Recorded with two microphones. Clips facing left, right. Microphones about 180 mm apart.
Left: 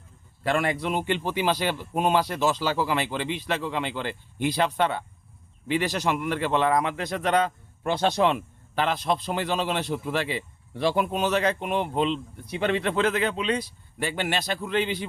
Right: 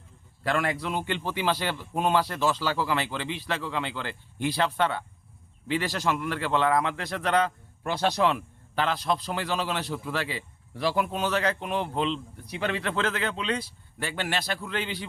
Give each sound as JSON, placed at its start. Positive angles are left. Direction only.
{"t": 0.4, "sound": "a man's voice", "side_deg": 20}